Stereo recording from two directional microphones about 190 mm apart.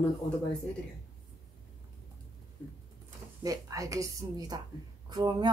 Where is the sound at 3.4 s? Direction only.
20° right (ahead or behind).